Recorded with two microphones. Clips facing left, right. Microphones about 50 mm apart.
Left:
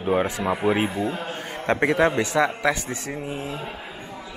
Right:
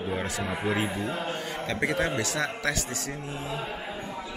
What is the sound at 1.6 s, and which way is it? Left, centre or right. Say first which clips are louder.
Speech: left 8 dB; left.